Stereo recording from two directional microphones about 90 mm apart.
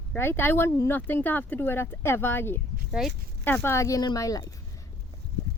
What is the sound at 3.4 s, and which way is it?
Speech, 25° left (ahead or behind).